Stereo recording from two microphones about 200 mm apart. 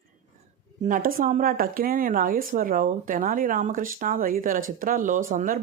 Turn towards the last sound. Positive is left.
turn(degrees=-45)  # may be behind; listen again after turning